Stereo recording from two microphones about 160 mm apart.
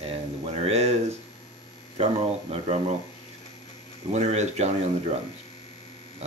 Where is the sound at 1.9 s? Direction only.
40° right (ahead or behind).